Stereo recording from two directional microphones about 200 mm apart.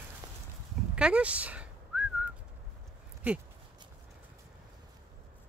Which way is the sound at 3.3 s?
10° right (ahead or behind).